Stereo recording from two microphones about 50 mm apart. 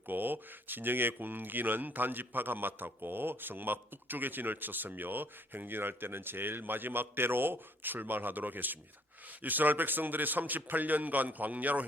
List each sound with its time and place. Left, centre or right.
0.1 s speech: right